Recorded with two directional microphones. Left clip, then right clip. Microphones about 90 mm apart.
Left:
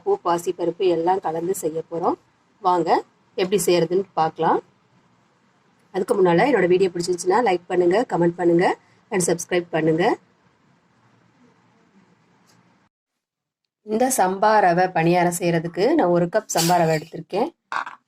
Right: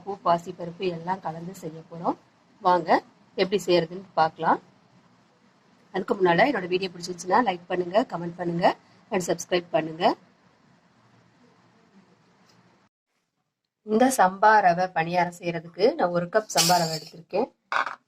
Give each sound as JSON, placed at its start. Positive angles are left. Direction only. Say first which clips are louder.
{"t": 0.0, "sound": "a woman's voice", "louder": "left 4 dB", "side_deg": 35}
{"t": 5.9, "sound": "a woman's voice", "louder": "left 5 dB", "side_deg": 35}
{"t": 13.8, "sound": "speech", "louder": "left 1 dB", "side_deg": 50}
{"t": 16.7, "sound": "speech", "louder": "left 6 dB", "side_deg": 70}